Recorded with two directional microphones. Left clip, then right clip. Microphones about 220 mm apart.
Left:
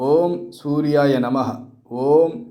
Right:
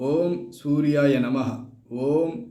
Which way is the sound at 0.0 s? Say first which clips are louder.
Left 6 dB; 5° left (ahead or behind).